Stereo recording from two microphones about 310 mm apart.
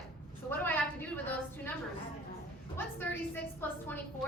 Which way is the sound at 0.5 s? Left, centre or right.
Centre.